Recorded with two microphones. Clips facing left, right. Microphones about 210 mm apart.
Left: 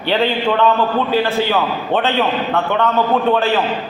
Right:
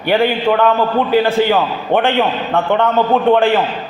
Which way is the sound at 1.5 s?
15° right (ahead or behind).